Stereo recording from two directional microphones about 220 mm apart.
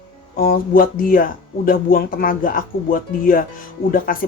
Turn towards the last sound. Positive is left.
turn(degrees=40)  # may be behind; listen again after turning